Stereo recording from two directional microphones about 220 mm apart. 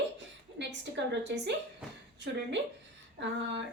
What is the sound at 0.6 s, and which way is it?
Speech, 50° right (ahead or behind).